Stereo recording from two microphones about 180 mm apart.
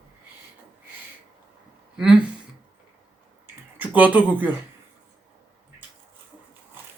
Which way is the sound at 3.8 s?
10° right (ahead or behind).